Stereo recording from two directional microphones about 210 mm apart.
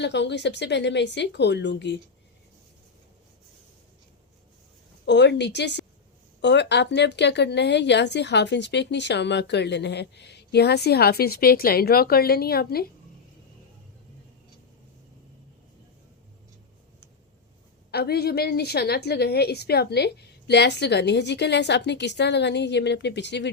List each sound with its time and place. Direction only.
0.0 s speech: 55° left (ahead or behind)
5.0 s a woman's voice: 55° left (ahead or behind)
17.9 s a woman's voice: 50° left (ahead or behind)